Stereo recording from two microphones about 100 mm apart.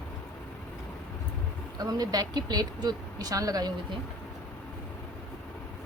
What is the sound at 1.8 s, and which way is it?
Speech, 40° right (ahead or behind).